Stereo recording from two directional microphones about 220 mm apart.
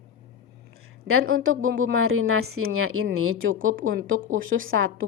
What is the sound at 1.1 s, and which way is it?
A woman's voice, 75° right (ahead or behind).